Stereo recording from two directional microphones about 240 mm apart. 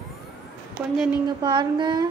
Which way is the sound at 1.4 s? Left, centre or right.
Centre.